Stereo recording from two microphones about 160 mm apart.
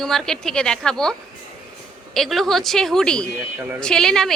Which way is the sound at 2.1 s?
Centre (ahead or behind).